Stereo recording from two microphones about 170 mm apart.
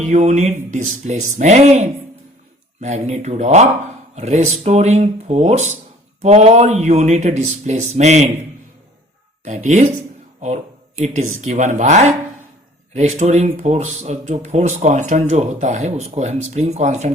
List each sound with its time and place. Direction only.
0.0 s speech: 45° right (ahead or behind)
9.6 s speech: 45° right (ahead or behind)